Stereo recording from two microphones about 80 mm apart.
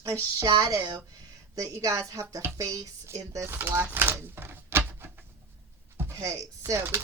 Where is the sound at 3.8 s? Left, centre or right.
Right.